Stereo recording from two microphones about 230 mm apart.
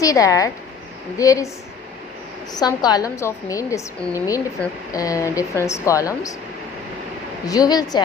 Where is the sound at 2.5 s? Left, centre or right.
Centre.